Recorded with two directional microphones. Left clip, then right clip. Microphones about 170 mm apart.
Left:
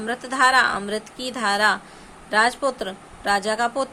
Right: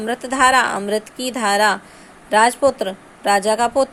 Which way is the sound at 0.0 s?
25° right (ahead or behind).